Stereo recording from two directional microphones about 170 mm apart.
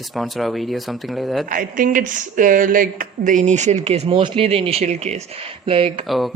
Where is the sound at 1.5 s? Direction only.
55° right (ahead or behind); by 6.1 s 30° right (ahead or behind).